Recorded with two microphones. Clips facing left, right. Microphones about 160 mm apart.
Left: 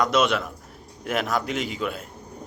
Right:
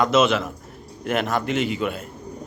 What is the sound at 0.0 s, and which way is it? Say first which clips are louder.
Speech: right 3 dB; centre (ahead or behind).